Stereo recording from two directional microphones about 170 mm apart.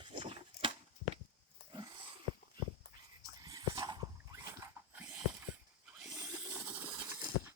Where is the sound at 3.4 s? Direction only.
20° right (ahead or behind).